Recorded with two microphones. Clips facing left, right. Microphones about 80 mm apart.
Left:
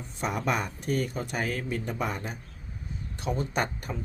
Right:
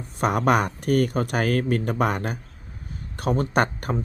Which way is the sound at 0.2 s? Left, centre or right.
Right.